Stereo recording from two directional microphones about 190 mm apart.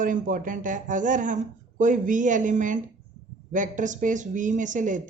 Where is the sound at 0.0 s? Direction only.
45° right (ahead or behind).